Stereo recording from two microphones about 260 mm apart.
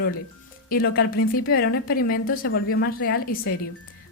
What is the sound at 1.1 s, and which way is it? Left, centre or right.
Speech, left.